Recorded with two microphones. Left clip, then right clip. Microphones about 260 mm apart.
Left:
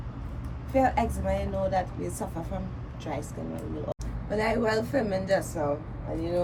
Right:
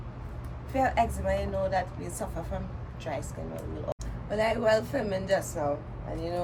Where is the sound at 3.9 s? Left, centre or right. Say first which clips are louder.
Right 1 dB; centre.